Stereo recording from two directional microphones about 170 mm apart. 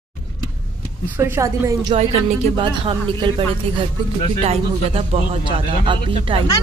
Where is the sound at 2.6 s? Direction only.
30° right (ahead or behind).